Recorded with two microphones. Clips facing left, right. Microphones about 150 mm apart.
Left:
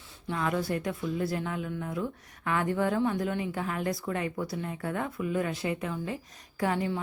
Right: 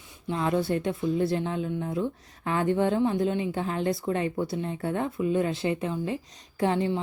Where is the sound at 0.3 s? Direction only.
25° right (ahead or behind).